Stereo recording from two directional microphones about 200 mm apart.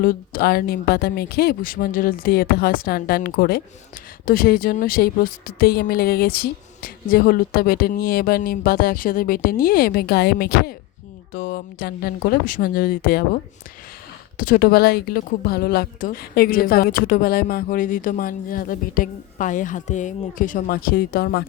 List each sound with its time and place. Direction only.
0.0 s a woman's voice: 45° left (ahead or behind)
14.3 s a woman's voice: 45° left (ahead or behind)